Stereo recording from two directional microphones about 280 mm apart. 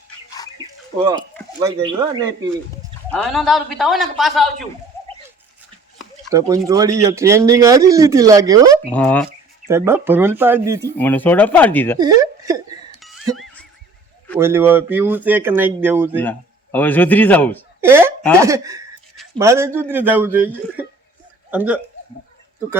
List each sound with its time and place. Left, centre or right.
0.6 s a sound: centre
1.5 s speech: centre
3.1 s a man's voice: centre
4.9 s a sound: centre
6.7 s speech: centre
8.9 s a man's voice: centre
9.6 s speech: centre
10.9 s speech: centre
11.9 s speech: centre
13.0 s music: centre
14.3 s speech: centre
16.7 s speech: centre
17.7 s speech: centre